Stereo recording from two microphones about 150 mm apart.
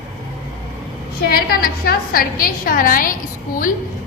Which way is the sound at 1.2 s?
85° left.